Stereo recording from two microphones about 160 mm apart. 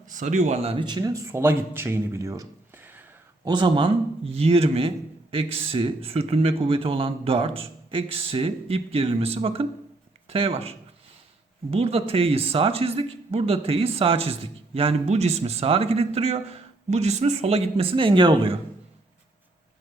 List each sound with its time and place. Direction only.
0.1 s speech: 50° right (ahead or behind); by 3.0 s 10° right (ahead or behind)
3.4 s a man's voice: 30° right (ahead or behind)